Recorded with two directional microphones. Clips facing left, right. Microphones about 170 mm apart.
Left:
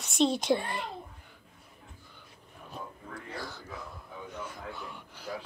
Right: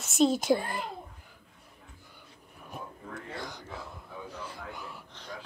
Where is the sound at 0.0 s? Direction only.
5° right (ahead or behind).